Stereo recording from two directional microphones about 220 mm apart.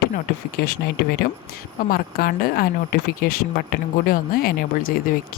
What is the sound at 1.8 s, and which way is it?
Speech, 40° left (ahead or behind).